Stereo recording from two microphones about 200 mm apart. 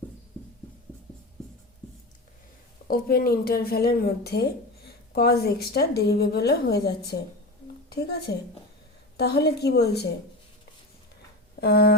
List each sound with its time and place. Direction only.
2.8 s a woman's voice: 45° left (ahead or behind)
11.6 s a woman's voice: 50° left (ahead or behind)